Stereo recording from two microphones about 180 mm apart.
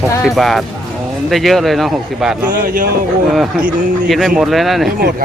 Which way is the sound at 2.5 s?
50° right (ahead or behind).